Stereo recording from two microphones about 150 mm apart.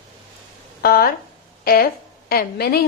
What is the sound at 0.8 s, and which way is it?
A woman's voice, 80° left.